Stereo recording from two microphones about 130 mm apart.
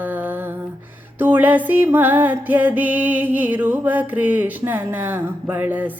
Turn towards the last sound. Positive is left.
turn(degrees=-15)  # may be behind; listen again after turning